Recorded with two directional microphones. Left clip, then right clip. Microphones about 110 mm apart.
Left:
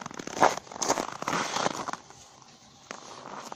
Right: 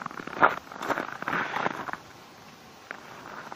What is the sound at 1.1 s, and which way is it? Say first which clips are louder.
Fireworks: right 1 dB; 90° left.